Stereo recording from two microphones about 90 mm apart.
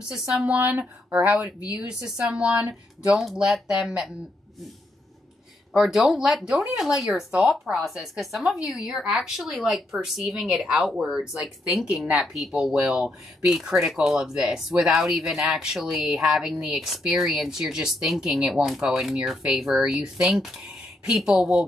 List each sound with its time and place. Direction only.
0.1 s speech: 5° right (ahead or behind)
0.6 s speech: 20° right (ahead or behind)
5.7 s speech: 5° right (ahead or behind)